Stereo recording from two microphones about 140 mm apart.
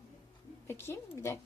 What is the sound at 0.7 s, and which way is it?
Speech, 15° left (ahead or behind).